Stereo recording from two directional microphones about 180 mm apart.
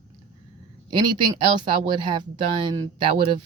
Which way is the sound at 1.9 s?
25° right (ahead or behind).